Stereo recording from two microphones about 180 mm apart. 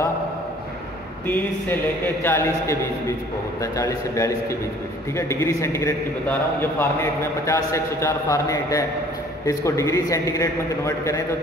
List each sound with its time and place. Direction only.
1.2 s a man's voice: 10° left (ahead or behind)